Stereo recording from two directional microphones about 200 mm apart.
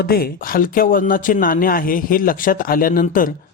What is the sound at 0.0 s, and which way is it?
Speech, 50° left (ahead or behind).